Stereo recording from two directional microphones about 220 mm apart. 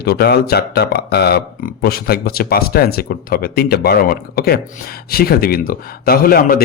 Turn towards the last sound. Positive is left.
turn(degrees=40)  # may be behind; listen again after turning